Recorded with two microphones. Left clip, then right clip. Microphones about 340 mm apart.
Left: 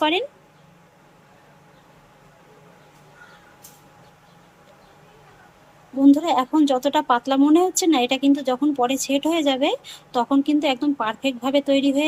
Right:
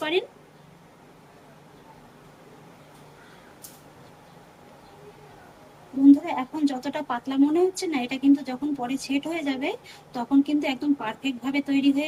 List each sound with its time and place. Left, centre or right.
0.0 s speech: centre
6.1 s speech: centre